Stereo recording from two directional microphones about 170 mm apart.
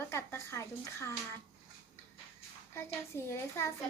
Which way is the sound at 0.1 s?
15° left (ahead or behind).